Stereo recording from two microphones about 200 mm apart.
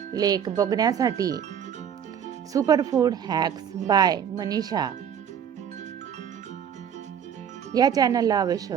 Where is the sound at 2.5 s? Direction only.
15° right (ahead or behind).